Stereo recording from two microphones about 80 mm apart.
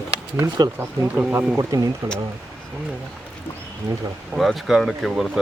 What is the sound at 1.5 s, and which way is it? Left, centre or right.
Speech, right.